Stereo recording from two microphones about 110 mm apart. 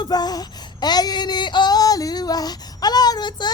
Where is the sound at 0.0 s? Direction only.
40° left (ahead or behind).